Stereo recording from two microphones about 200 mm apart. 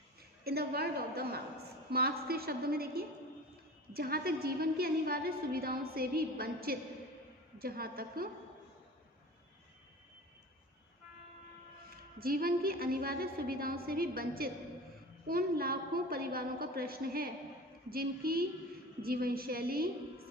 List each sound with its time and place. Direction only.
0.4 s a woman's voice: 50° right (ahead or behind)
12.2 s a woman's voice: 50° right (ahead or behind)